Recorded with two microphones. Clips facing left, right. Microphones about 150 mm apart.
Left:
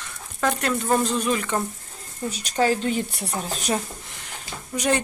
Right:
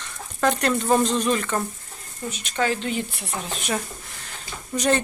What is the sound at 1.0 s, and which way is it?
Speech, 10° left (ahead or behind).